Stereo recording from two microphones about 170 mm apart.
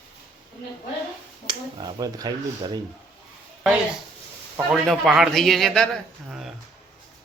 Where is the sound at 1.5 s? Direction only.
25° right (ahead or behind).